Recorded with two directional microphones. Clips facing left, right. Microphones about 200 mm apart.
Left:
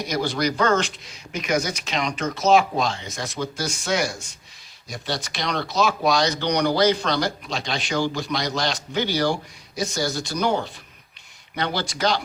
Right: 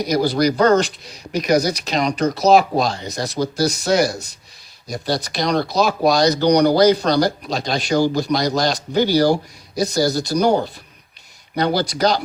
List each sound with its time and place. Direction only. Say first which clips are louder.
0.0 s speech: right 7 dB; 35° right (ahead or behind)